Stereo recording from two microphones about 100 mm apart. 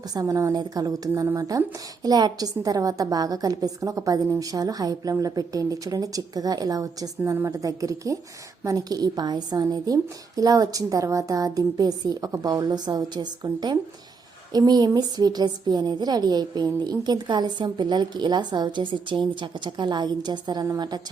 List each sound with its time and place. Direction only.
0.1 s a woman's voice: 35° right (ahead or behind)